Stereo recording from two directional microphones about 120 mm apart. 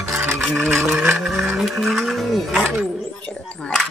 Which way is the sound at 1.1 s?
Centre (ahead or behind).